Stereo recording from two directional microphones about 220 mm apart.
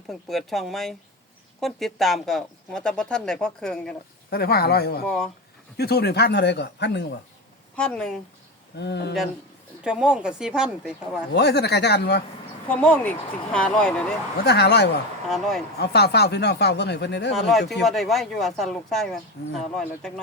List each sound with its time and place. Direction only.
0.1 s speech: centre (ahead or behind)
4.3 s speech: 45° left (ahead or behind)
5.0 s speech: 5° left (ahead or behind)
5.7 s speech: 45° left (ahead or behind)
7.8 s speech: 5° left (ahead or behind)
8.7 s speech: 50° left (ahead or behind)
9.8 s speech: 5° right (ahead or behind)
11.3 s speech: 50° left (ahead or behind)
12.6 s speech: 5° left (ahead or behind)
14.4 s speech: 50° left (ahead or behind)
15.3 s speech: centre (ahead or behind)
15.8 s speech: 50° left (ahead or behind)
17.3 s speech: centre (ahead or behind)